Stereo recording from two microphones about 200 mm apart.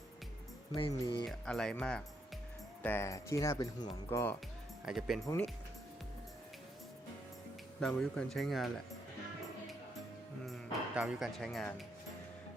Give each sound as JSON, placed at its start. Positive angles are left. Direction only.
{"t": 0.8, "sound": "speech", "side_deg": 25}
{"t": 1.2, "sound": "speech", "side_deg": 0}
{"t": 4.9, "sound": "speech", "side_deg": 0}
{"t": 7.8, "sound": "speech", "side_deg": 5}
{"t": 10.4, "sound": "speech", "side_deg": 0}